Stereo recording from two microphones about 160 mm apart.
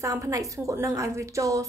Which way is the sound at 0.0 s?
20° right (ahead or behind).